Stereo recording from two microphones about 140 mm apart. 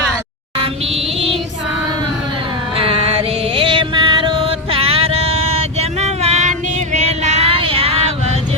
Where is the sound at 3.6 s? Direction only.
35° right (ahead or behind).